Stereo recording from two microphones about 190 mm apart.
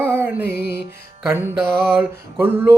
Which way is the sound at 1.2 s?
10° right (ahead or behind).